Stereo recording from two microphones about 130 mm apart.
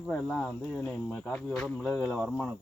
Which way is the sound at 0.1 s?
5° left (ahead or behind).